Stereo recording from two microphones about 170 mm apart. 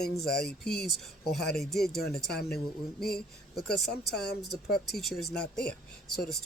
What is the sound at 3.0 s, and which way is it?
Speech, 65° left (ahead or behind).